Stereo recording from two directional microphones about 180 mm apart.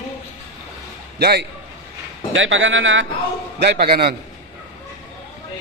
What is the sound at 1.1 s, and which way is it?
Speech, 65° right (ahead or behind).